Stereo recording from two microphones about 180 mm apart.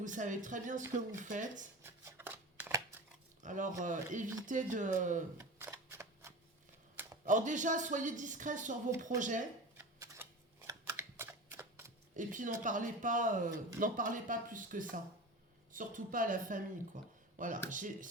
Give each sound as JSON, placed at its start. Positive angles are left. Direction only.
{"t": 0.0, "sound": "speech", "side_deg": -45}
{"t": 1.8, "sound": "shuffling cards", "side_deg": -10}
{"t": 3.4, "sound": "speech", "side_deg": -45}
{"t": 5.4, "sound": "a sound", "side_deg": -15}
{"t": 7.3, "sound": "speech", "side_deg": -45}
{"t": 10.7, "sound": "a sound", "side_deg": -15}
{"t": 12.1, "sound": "speech", "side_deg": -45}